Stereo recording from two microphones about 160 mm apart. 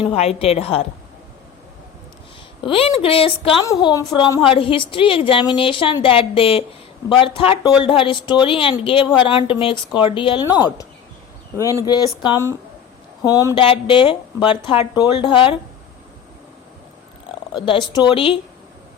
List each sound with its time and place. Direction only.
0.0 s a woman's voice: 35° left (ahead or behind)
2.6 s a woman's voice: 35° left (ahead or behind)
3.7 s a woman's voice: 25° left (ahead or behind)
13.6 s a woman's voice: 35° left (ahead or behind)
17.2 s speech: 30° left (ahead or behind)